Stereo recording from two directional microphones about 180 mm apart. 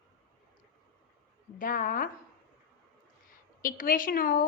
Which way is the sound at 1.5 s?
50° left (ahead or behind).